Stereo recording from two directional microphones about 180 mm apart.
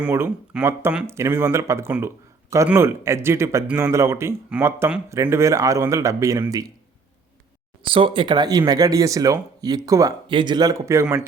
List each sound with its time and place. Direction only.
0.0 s speech: 10° right (ahead or behind)
7.8 s speech: 30° right (ahead or behind); by 11.3 s 15° right (ahead or behind)